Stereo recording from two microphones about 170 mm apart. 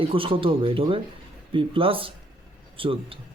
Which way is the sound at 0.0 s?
30° right (ahead or behind).